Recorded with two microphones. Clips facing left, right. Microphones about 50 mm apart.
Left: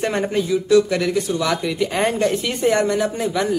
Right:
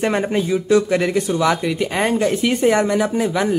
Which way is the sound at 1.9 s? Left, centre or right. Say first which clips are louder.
Right 1 dB; centre.